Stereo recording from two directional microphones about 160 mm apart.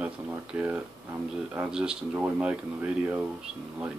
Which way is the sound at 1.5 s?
5° right (ahead or behind).